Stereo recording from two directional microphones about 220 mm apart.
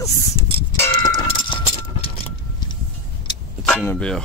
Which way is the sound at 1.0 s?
20° left (ahead or behind).